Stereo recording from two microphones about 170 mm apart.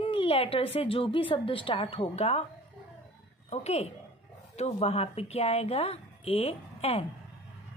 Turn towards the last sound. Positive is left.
turn(degrees=35)  # may be behind; listen again after turning